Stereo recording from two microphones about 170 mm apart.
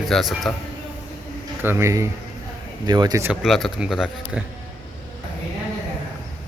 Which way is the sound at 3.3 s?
Centre (ahead or behind).